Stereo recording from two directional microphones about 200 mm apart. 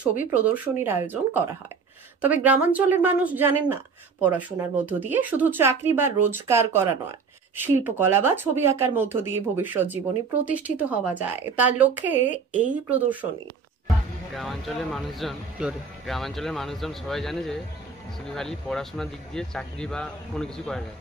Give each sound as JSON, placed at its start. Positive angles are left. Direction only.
{"t": 0.3, "sound": "speech", "side_deg": -10}
{"t": 14.3, "sound": "speech", "side_deg": 0}